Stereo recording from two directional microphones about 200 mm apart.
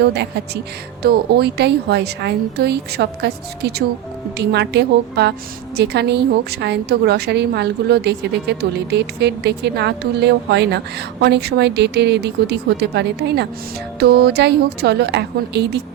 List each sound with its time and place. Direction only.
0.0 s a woman's voice: 55° right (ahead or behind)